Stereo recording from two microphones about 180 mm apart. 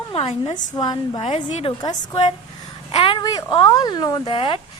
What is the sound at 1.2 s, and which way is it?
Speech, 40° left (ahead or behind).